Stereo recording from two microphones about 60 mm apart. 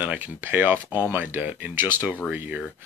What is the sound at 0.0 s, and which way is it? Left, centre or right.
Speech, right.